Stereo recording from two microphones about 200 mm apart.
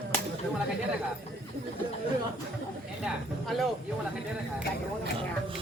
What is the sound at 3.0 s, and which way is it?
Speech, centre (ahead or behind).